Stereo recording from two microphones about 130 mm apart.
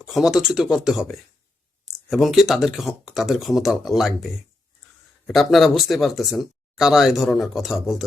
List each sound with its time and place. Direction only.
0.0 s speech: 5° right (ahead or behind)